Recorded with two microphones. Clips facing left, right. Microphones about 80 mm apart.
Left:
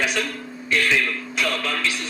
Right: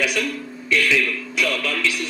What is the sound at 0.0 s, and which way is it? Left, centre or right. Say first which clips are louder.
A man's voice: right 1 dB; left.